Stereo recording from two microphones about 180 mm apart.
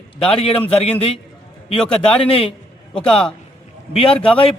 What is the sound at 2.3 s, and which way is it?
Speech, 30° left (ahead or behind).